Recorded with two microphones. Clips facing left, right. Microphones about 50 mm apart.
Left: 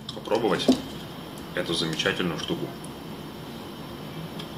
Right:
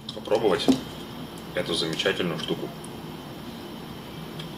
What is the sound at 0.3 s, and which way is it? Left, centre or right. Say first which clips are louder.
Speech: right 1 dB; centre.